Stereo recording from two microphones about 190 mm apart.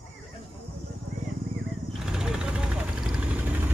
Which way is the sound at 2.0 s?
5° right (ahead or behind).